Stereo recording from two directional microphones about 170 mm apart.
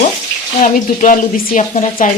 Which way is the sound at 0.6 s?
55° left (ahead or behind).